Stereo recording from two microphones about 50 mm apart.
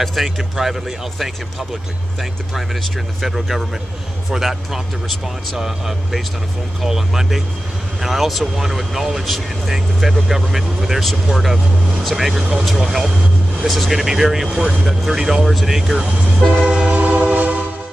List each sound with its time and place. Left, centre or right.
0.0 s speech: centre
2.5 s speech: centre
16.6 s vehicle: centre
16.9 s train: right